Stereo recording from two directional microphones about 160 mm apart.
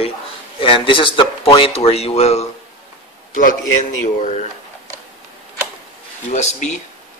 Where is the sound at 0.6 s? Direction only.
30° left (ahead or behind).